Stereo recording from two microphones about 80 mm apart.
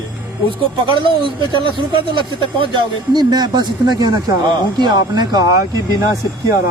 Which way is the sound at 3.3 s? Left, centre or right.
Right.